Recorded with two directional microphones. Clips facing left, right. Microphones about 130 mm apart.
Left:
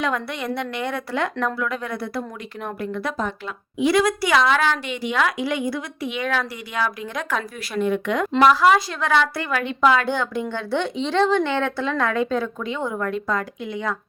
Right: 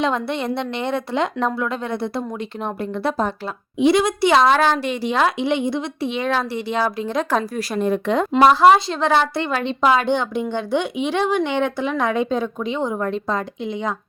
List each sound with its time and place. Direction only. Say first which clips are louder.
0.0 s a woman's voice: right 4 dB; 25° right (ahead or behind)
3.8 s a woman's voice: right 3 dB; 20° right (ahead or behind)